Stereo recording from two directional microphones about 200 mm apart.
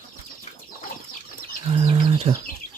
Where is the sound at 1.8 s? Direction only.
30° right (ahead or behind).